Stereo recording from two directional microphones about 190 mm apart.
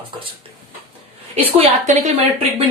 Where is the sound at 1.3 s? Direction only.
35° right (ahead or behind).